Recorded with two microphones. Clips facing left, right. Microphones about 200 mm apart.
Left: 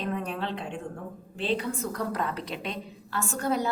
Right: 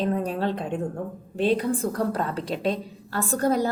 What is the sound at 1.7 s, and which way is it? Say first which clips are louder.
A woman's voice: right 5 dB; 30° right (ahead or behind).